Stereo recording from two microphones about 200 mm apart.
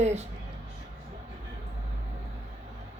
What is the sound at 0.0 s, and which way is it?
Music, 35° right (ahead or behind).